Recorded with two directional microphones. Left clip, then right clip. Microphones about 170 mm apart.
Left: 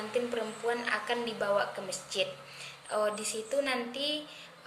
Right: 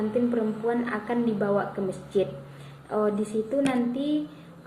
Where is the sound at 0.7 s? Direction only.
20° left (ahead or behind).